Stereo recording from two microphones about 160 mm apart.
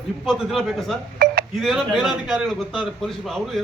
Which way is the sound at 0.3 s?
Centre (ahead or behind).